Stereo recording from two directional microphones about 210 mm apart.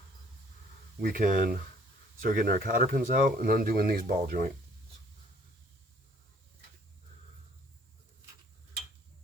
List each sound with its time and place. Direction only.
1.0 s speech: 40° right (ahead or behind)